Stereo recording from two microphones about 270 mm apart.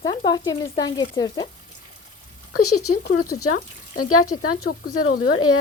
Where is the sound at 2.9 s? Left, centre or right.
Left.